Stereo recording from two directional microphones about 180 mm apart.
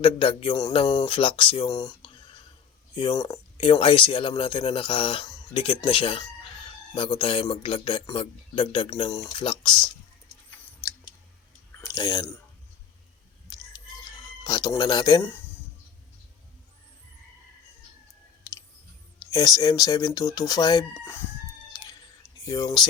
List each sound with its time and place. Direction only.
0.0 s speech: 30° left (ahead or behind)
3.7 s speech: 30° left (ahead or behind)
11.8 s speech: 20° left (ahead or behind)
14.4 s speech: 20° left (ahead or behind)
19.3 s speech: 20° left (ahead or behind)
22.4 s speech: 20° left (ahead or behind)